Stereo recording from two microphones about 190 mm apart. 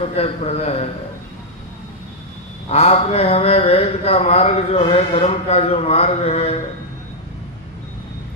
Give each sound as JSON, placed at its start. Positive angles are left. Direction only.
{"t": 0.0, "sound": "speech", "side_deg": 30}
{"t": 2.7, "sound": "speech", "side_deg": 35}